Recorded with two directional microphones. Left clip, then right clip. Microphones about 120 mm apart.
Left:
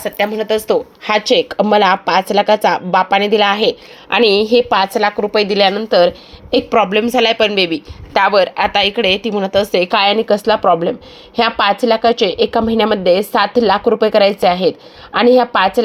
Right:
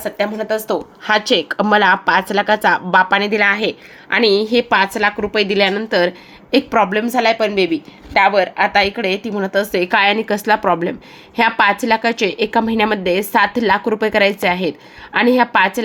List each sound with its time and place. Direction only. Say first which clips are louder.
0.0 s speech: left 3 dB; 70° left (ahead or behind)
1.2 s a woman's voice: left 3 dB; 15° left (ahead or behind); by 9.3 s 45° left (ahead or behind)
9.3 s a woman's voice: left 4 dB; 30° left (ahead or behind)
10.2 s a woman's voice: left 3 dB; centre (ahead or behind)